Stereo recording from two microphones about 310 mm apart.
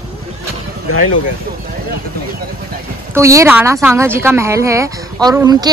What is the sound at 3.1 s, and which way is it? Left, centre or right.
Speech, centre.